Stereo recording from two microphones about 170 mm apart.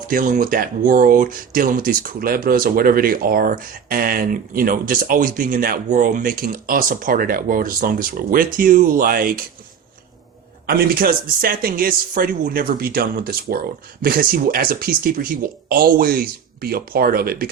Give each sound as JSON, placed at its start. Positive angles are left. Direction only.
{"t": 0.1, "sound": "speech", "side_deg": -50}
{"t": 10.7, "sound": "speech", "side_deg": -60}